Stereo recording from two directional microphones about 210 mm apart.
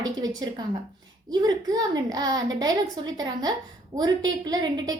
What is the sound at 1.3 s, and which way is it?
A woman's voice, 20° right (ahead or behind).